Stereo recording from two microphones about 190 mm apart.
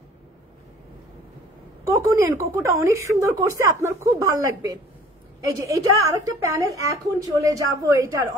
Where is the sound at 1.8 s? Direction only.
15° right (ahead or behind).